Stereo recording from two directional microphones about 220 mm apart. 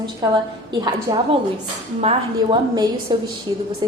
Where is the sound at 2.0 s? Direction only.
25° right (ahead or behind).